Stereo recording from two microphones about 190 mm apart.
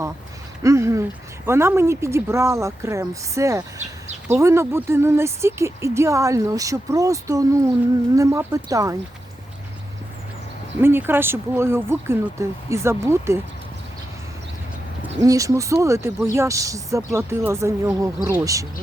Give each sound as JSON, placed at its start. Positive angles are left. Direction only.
{"t": 0.6, "sound": "speech", "side_deg": -15}
{"t": 10.8, "sound": "speech", "side_deg": -10}
{"t": 15.2, "sound": "speech", "side_deg": -15}